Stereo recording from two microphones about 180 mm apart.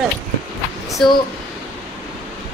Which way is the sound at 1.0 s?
Centre (ahead or behind).